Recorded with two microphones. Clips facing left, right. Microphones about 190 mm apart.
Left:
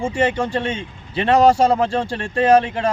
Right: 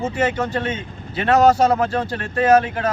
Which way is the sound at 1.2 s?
30° left (ahead or behind).